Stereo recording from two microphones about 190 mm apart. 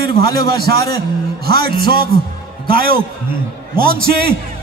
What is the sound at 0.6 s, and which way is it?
Music, 55° right (ahead or behind).